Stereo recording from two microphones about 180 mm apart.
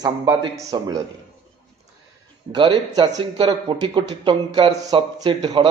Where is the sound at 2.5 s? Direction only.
25° right (ahead or behind).